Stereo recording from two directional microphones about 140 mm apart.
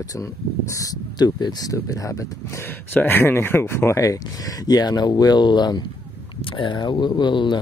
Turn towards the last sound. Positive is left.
turn(degrees=35)  # may be behind; listen again after turning